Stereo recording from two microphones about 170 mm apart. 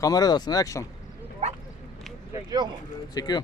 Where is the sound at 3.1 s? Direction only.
25° left (ahead or behind).